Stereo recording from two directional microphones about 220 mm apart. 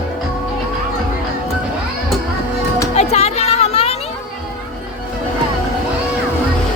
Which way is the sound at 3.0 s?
30° left (ahead or behind).